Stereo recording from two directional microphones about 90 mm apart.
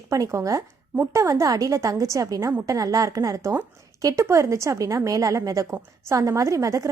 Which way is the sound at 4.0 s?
40° right (ahead or behind).